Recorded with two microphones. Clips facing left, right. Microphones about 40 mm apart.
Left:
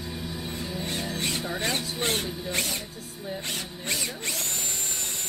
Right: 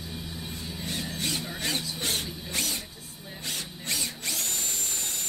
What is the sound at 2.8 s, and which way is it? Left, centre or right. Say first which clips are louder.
Music: left 4 dB; centre.